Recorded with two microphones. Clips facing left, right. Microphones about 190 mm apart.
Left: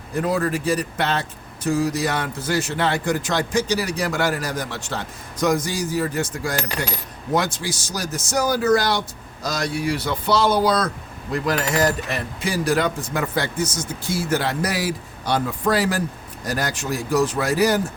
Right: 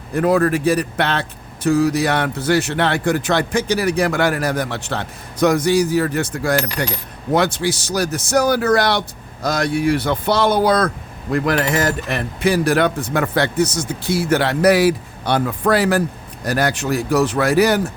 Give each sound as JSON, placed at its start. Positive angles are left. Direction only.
{"t": 0.2, "sound": "speech", "side_deg": -60}